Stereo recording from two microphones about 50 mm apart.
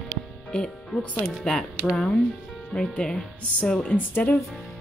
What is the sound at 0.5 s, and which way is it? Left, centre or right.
Speech, centre.